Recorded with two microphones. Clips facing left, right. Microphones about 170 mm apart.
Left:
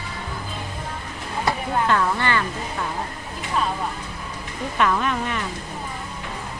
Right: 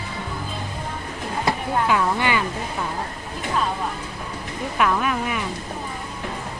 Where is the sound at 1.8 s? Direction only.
10° right (ahead or behind).